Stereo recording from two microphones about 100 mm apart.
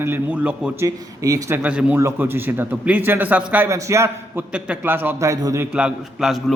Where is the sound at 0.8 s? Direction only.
35° right (ahead or behind).